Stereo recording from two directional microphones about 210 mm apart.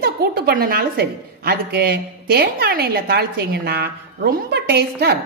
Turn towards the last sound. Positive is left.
turn(degrees=-50)  # may be behind; listen again after turning